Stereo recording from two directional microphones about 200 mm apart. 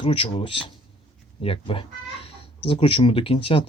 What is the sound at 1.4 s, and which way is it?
Cat, 25° left (ahead or behind).